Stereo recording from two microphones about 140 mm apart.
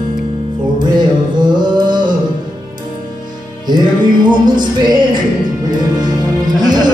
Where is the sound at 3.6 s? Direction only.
30° right (ahead or behind).